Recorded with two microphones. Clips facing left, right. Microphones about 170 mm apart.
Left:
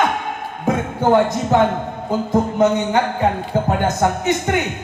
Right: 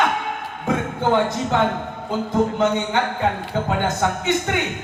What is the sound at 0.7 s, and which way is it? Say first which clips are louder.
A man's voice: left 4 dB; 40° left (ahead or behind).